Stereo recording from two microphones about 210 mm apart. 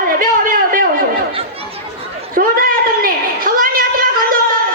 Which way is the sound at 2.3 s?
40° right (ahead or behind).